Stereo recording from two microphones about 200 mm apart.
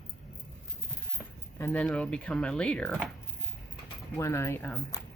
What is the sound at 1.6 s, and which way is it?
Speech, 10° left (ahead or behind).